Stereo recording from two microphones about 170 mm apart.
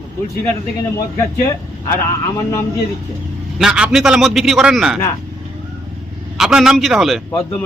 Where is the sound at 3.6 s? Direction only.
5° right (ahead or behind).